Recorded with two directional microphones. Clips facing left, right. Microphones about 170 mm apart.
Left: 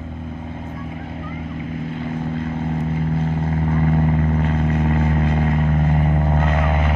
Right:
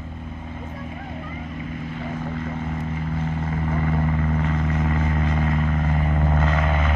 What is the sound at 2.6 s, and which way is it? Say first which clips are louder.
Vehicle: left 5 dB; 35° left (ahead or behind).